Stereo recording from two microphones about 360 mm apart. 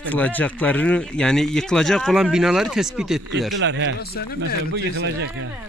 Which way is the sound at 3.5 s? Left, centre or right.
Right.